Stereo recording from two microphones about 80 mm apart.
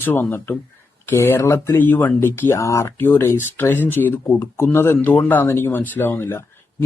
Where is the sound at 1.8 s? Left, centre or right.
Left.